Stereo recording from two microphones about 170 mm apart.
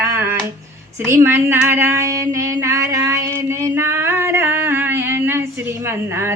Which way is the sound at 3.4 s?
20° right (ahead or behind).